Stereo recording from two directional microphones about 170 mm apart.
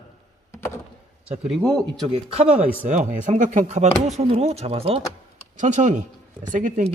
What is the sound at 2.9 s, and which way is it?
A man's voice, 45° right (ahead or behind).